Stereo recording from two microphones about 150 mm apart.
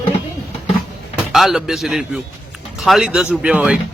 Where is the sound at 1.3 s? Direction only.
Centre (ahead or behind).